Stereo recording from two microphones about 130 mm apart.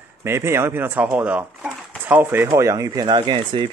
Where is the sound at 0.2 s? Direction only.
20° right (ahead or behind).